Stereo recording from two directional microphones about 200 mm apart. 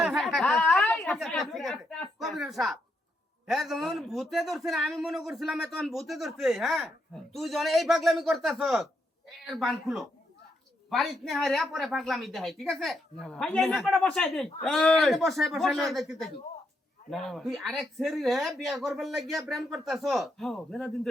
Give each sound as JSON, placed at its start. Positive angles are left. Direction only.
{"t": 0.0, "sound": "a man's voice", "side_deg": 0}